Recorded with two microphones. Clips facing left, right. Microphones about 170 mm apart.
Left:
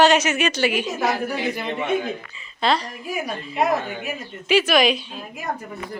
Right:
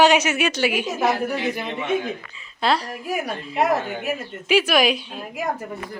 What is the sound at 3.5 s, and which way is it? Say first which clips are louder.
Speech: right 1 dB; 75° right (ahead or behind).